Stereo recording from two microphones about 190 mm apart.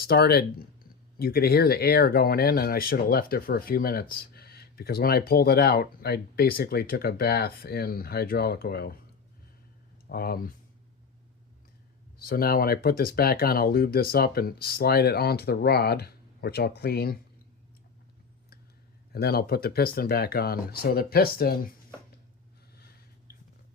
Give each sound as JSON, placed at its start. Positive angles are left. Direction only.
{"t": 0.1, "sound": "speech", "side_deg": 55}
{"t": 10.1, "sound": "speech", "side_deg": 50}
{"t": 12.2, "sound": "speech", "side_deg": 50}
{"t": 19.1, "sound": "speech", "side_deg": 55}